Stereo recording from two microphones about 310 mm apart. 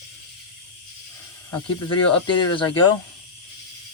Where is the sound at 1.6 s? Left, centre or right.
Left.